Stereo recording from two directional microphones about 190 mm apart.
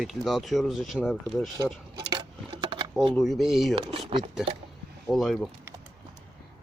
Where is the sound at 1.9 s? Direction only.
25° right (ahead or behind).